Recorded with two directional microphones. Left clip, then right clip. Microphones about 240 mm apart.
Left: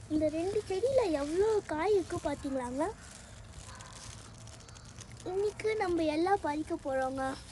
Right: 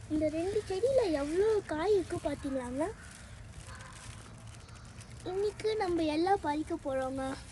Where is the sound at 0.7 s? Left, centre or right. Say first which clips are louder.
Even; centre.